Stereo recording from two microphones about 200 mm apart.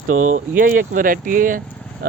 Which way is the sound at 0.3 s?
40° right (ahead or behind).